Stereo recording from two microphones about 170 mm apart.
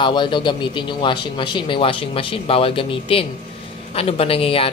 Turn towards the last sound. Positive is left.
turn(degrees=35)  # may be behind; listen again after turning